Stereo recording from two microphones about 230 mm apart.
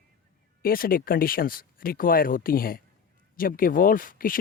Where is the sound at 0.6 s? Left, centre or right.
Left.